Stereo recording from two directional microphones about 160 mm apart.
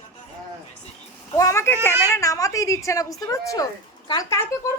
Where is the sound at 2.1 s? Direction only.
20° left (ahead or behind).